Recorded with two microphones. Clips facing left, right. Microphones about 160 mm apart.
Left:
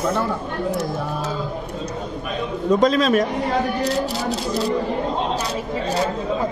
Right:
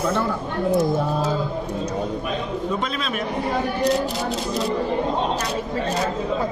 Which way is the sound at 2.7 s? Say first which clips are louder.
Left 10 dB; 40° left (ahead or behind).